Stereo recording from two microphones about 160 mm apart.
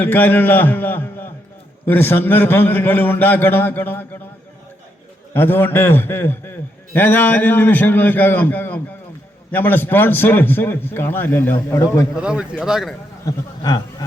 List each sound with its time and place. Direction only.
0.0 s a man's voice: 15° left (ahead or behind)
5.3 s a man's voice: 15° left (ahead or behind)
12.1 s speech: 5° right (ahead or behind)
13.2 s a man's voice: 25° left (ahead or behind)